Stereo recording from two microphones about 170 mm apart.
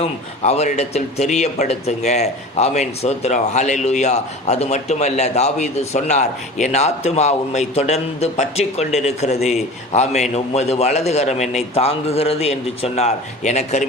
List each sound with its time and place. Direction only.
0.0 s speech: 40° left (ahead or behind)